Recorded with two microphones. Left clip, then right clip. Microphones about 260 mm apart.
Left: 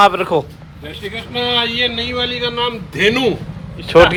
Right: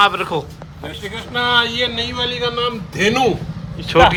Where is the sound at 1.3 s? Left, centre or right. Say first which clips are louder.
Right 1 dB; right.